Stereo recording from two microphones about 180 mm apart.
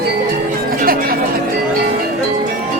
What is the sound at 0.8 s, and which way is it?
Music, 55° right (ahead or behind).